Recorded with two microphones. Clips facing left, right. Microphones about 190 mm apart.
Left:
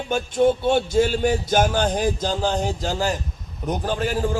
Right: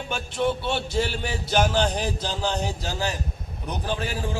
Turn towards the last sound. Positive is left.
turn(degrees=45)  # may be behind; listen again after turning